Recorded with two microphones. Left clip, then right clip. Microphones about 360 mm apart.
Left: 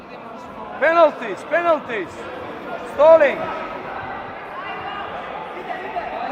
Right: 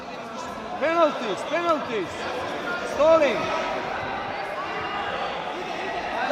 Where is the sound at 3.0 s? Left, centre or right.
Left.